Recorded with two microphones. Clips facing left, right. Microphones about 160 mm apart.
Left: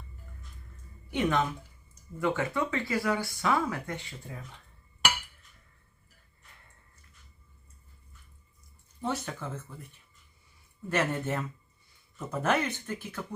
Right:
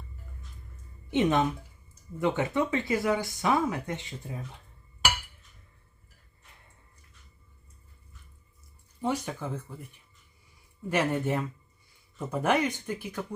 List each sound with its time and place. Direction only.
1.1 s speech: 20° right (ahead or behind)
9.0 s speech: 10° right (ahead or behind)
10.8 s speech: 15° right (ahead or behind)